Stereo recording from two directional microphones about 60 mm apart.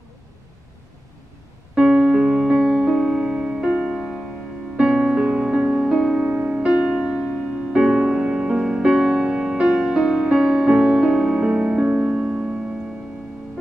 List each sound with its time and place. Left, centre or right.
1.8 s keyboard: centre
3.0 s music: centre
3.3 s music: right
3.6 s music: centre
6.1 s music: right